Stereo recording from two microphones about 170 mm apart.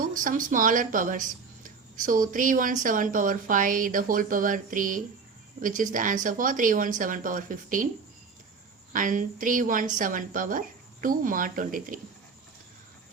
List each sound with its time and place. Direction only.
0.0 s speech: 55° right (ahead or behind)
8.9 s speech: 50° right (ahead or behind)